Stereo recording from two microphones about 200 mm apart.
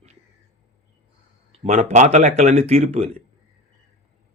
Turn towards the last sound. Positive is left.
turn(degrees=-30)  # may be behind; listen again after turning